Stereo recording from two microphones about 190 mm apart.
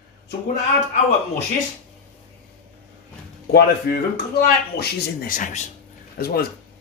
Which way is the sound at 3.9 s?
60° left (ahead or behind).